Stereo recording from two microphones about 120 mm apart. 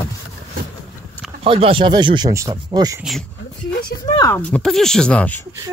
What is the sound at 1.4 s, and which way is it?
Speech, 50° right (ahead or behind).